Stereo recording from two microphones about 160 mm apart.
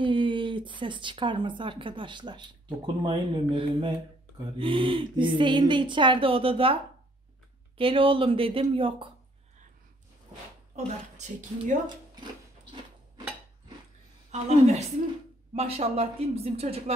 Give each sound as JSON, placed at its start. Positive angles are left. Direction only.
{"t": 0.0, "sound": "speech", "side_deg": -30}
{"t": 11.1, "sound": "a woman's voice", "side_deg": -50}
{"t": 14.3, "sound": "a woman's voice", "side_deg": -45}